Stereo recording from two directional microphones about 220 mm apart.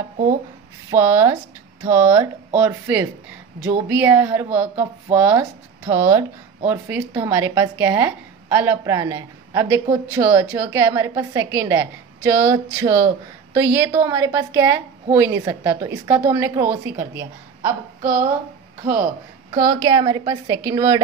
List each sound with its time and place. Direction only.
0.8 s a woman's voice: 10° right (ahead or behind)
19.5 s a woman's voice: 15° right (ahead or behind)